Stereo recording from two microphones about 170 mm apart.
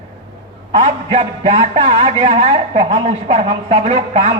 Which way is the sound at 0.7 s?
35° right (ahead or behind).